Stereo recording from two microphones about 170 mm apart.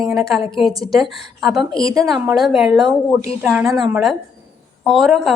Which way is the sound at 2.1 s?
Centre (ahead or behind).